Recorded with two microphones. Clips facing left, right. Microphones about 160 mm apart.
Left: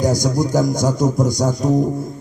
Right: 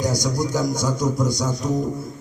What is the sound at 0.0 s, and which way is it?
A man's voice, 45° left (ahead or behind).